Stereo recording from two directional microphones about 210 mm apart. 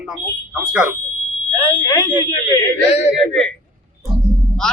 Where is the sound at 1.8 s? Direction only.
20° left (ahead or behind).